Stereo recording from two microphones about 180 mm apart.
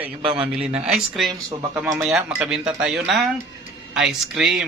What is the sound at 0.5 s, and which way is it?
A man's voice, 5° right (ahead or behind).